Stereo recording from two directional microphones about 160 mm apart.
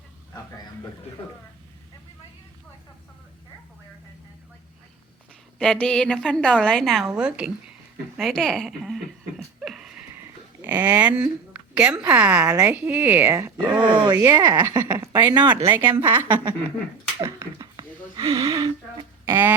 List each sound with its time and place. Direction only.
5.5 s a woman's voice: 5° left (ahead or behind)
9.6 s a sound: 5° right (ahead or behind)
11.7 s speech: 5° right (ahead or behind)
12.5 s a woman's voice: 20° right (ahead or behind)
15.8 s speech: 10° right (ahead or behind)
17.2 s a sound: 20° right (ahead or behind)